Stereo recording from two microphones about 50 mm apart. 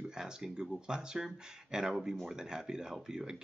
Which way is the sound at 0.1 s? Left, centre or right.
Centre.